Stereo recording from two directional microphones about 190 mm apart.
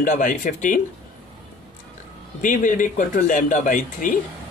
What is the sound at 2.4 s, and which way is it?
Speech, 45° left (ahead or behind).